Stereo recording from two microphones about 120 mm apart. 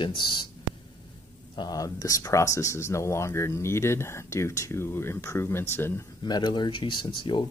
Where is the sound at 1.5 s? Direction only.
30° left (ahead or behind).